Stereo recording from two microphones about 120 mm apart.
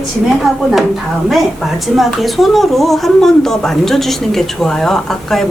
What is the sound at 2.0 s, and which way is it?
Speech, centre (ahead or behind).